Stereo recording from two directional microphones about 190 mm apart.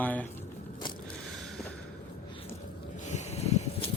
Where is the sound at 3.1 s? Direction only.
35° left (ahead or behind).